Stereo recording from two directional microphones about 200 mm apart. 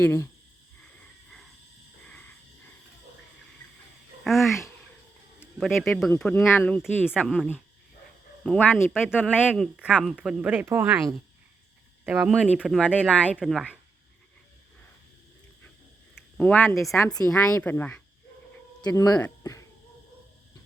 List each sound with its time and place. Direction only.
0.0 s speech: 10° left (ahead or behind)
4.2 s speech: centre (ahead or behind)
12.0 s speech: 5° right (ahead or behind)
16.4 s speech: 10° left (ahead or behind)